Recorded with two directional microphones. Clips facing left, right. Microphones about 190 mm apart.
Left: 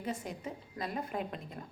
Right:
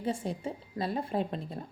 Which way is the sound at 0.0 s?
30° right (ahead or behind).